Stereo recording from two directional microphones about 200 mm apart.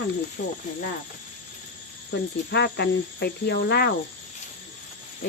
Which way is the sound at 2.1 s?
55° left (ahead or behind).